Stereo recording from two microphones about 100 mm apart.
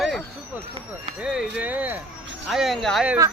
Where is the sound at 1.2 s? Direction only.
10° right (ahead or behind).